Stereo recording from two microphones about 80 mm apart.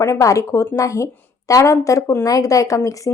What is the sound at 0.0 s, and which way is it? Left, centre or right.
A woman's voice, left.